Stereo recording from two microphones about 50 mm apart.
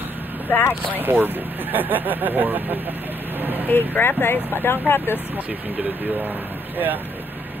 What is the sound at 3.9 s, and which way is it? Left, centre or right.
Speech, left.